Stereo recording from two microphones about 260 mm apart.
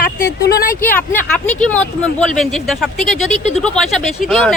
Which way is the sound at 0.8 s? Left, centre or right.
Centre.